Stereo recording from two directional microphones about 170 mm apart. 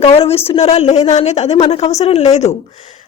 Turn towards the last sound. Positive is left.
turn(degrees=40)  # may be behind; listen again after turning